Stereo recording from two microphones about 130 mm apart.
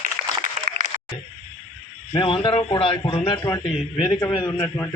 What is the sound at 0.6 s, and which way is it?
Applause, 90° right.